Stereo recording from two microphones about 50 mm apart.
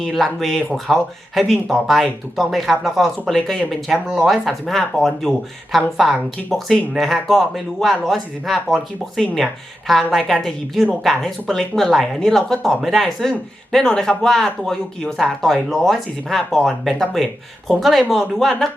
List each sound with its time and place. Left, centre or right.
0.0 s speech: centre
3.9 s speech: centre